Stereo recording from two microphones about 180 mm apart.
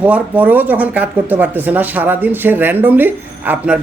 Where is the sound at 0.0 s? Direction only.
10° right (ahead or behind).